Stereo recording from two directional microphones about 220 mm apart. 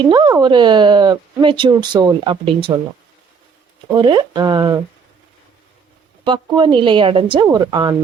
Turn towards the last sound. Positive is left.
turn(degrees=-20)  # may be behind; listen again after turning